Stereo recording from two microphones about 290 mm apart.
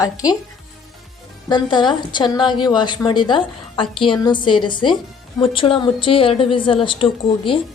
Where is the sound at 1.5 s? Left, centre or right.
Centre.